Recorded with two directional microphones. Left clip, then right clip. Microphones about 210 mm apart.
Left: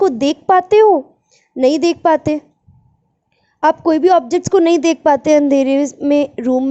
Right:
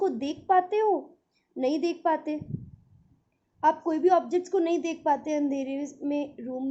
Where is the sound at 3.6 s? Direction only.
45° left (ahead or behind).